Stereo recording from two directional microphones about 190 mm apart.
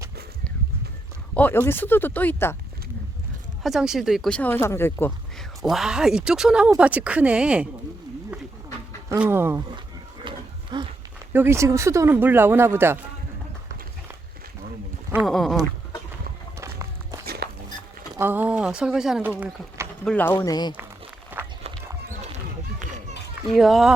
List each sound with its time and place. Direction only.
1.3 s speech: 10° left (ahead or behind)
3.6 s speech: centre (ahead or behind)
5.6 s speech: 5° right (ahead or behind)
9.0 s speech: 10° right (ahead or behind)
10.2 s a sound: 25° right (ahead or behind)
11.3 s speech: 10° right (ahead or behind)
15.3 s speech: centre (ahead or behind)
16.6 s walk: 15° right (ahead or behind)
17.2 s walk: 55° right (ahead or behind)
18.2 s speech: 10° right (ahead or behind)
20.1 s speech: 10° left (ahead or behind)
21.3 s run: 10° right (ahead or behind)
23.5 s speech: centre (ahead or behind)